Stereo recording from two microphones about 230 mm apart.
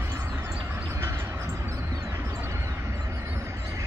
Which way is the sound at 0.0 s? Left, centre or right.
Centre.